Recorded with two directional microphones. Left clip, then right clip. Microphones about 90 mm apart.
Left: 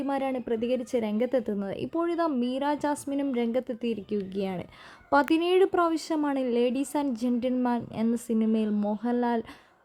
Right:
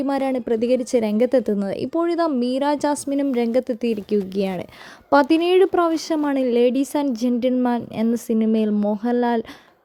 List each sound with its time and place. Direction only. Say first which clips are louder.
0.0 s a woman's voice: right 7 dB; 45° right (ahead or behind)